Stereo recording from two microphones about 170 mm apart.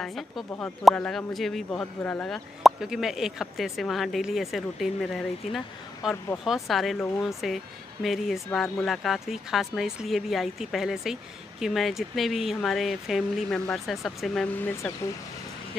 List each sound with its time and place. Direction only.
0.0 s speech: centre (ahead or behind)